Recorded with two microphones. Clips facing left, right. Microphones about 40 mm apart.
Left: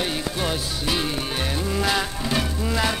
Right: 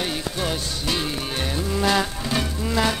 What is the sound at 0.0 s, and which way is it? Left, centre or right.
Music, centre.